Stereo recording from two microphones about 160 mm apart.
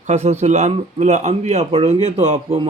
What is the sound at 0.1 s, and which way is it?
A man's voice, 45° right (ahead or behind).